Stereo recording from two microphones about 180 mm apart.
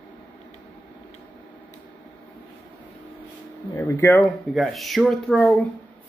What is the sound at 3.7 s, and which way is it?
Speech, 15° left (ahead or behind).